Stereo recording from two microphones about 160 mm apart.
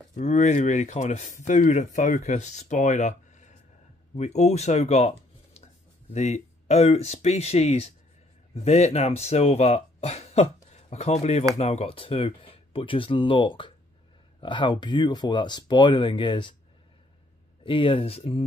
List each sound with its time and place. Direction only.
0.1 s speech: 45° left (ahead or behind); by 16.5 s 30° left (ahead or behind)
17.6 s speech: 30° left (ahead or behind)